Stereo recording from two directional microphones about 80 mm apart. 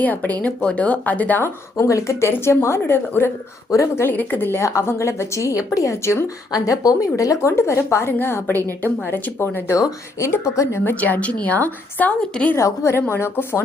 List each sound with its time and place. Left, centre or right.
0.0 s a woman's voice: left
1.7 s a woman's voice: left
3.7 s a woman's voice: left
4.0 s a woman's voice: left
6.5 s a woman's voice: left
12.5 s a woman's voice: left